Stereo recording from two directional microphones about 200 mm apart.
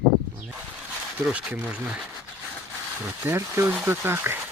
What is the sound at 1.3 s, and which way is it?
Speech, 5° right (ahead or behind).